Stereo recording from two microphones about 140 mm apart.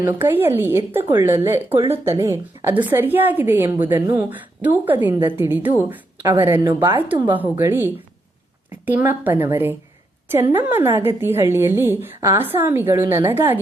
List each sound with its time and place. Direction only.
0.0 s a woman's voice: 15° right (ahead or behind)